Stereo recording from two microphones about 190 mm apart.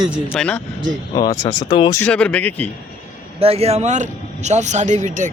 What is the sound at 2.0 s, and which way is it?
Speech, 5° left (ahead or behind).